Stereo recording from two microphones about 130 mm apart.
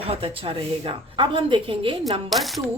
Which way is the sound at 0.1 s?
45° right (ahead or behind).